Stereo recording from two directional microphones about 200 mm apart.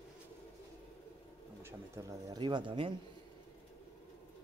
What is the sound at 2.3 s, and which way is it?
Speech, 20° right (ahead or behind).